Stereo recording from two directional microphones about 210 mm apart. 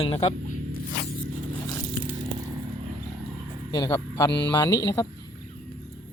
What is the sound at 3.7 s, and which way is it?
Speech, 15° left (ahead or behind).